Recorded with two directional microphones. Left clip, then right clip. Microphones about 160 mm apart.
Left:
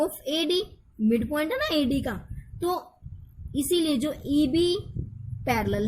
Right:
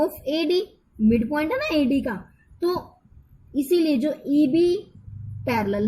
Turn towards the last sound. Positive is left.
turn(degrees=30)  # may be behind; listen again after turning